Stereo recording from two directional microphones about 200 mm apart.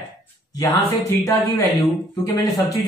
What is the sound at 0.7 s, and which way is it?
Speech, 15° left (ahead or behind).